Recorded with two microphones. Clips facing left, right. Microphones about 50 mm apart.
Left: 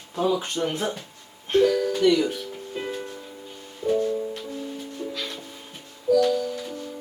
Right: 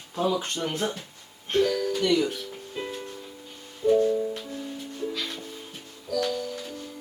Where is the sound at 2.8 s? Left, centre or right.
Centre.